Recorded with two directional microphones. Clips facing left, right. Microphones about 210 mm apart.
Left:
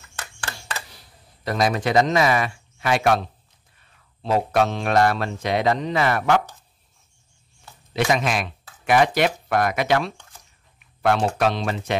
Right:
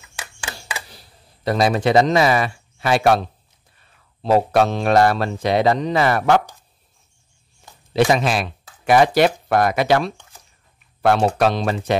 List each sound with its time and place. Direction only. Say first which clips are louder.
0.0 s typewriter: right 1 dB; 10° right (ahead or behind)
1.4 s speech: right 4 dB; 30° right (ahead or behind)
7.9 s speech: right 5 dB; 30° right (ahead or behind)